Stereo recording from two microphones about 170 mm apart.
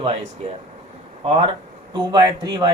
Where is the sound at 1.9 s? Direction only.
25° right (ahead or behind).